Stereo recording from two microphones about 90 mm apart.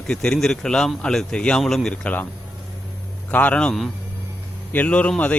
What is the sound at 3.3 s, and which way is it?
Speech, 20° left (ahead or behind).